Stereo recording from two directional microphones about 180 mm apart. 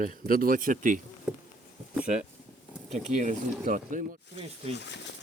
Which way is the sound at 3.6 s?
45° right (ahead or behind).